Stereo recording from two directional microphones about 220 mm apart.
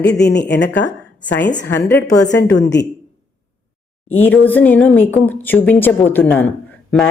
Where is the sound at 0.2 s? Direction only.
50° left (ahead or behind).